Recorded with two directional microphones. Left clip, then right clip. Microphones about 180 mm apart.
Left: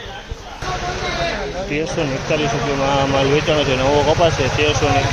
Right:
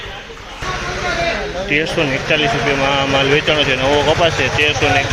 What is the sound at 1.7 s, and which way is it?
Speech, 5° left (ahead or behind).